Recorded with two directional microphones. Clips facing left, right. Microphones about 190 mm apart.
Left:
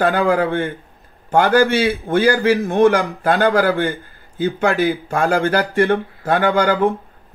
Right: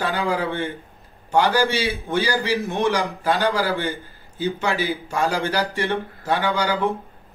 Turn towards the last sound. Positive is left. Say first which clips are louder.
# left 6 dB
turn(degrees=55)  # may be behind; listen again after turning